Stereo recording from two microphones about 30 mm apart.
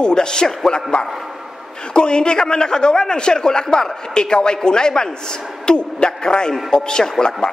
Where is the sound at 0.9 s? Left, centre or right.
Left.